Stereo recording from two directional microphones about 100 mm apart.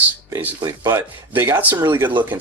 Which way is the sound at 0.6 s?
35° right (ahead or behind).